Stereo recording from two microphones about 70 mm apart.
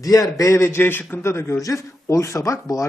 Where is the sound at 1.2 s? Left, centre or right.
Left.